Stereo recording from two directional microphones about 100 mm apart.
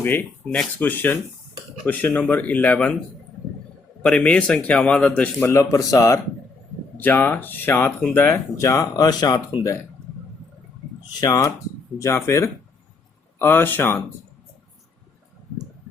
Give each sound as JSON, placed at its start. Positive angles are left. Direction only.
{"t": 0.0, "sound": "a man's voice", "side_deg": 20}
{"t": 4.0, "sound": "a man's voice", "side_deg": 10}
{"t": 5.4, "sound": "speech", "side_deg": 30}
{"t": 7.0, "sound": "speech", "side_deg": 20}
{"t": 11.2, "sound": "speech", "side_deg": 35}